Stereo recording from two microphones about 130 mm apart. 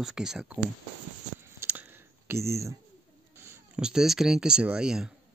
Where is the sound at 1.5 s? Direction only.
15° right (ahead or behind).